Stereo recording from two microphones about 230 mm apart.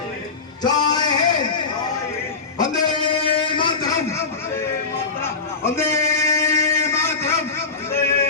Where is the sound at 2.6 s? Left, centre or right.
Left.